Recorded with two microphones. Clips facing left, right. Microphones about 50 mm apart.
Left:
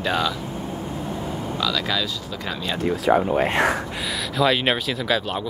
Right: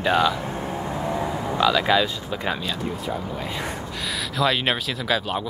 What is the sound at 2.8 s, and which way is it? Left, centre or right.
Speech, left.